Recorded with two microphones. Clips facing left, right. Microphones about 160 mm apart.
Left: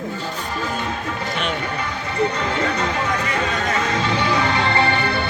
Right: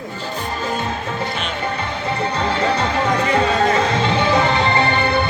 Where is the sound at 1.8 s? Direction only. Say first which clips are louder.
Left 3 dB; 30° right (ahead or behind).